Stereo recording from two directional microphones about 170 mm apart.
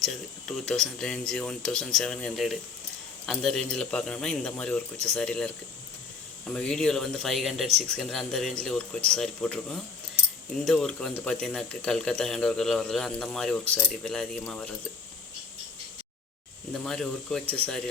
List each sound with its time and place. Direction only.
0.0 s speech: centre (ahead or behind)
6.5 s speech: 5° left (ahead or behind)
16.7 s speech: 5° left (ahead or behind)